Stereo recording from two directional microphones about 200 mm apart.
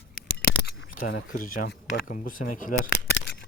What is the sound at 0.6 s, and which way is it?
Camera, 55° left (ahead or behind).